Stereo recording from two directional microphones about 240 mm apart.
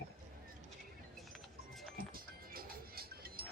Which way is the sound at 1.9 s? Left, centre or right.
Right.